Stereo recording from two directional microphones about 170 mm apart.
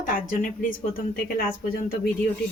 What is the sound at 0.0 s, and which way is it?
Speech, 50° left (ahead or behind).